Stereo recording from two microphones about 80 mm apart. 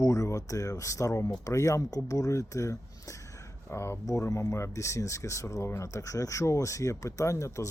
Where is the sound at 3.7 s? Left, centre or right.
Left.